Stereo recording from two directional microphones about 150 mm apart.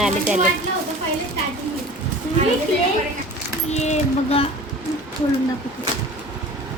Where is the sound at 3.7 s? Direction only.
50° left (ahead or behind).